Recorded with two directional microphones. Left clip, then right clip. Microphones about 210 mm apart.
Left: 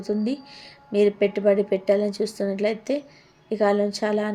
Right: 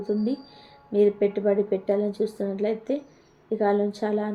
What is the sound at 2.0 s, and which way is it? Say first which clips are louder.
Speech: left 1 dB; 55° left (ahead or behind).